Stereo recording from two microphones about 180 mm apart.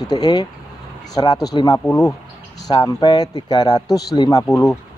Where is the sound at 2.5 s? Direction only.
20° left (ahead or behind).